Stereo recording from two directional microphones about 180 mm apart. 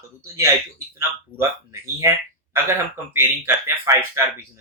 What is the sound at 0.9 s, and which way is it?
Speech, 15° right (ahead or behind).